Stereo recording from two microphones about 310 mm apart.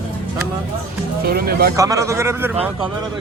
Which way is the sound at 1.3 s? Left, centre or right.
Right.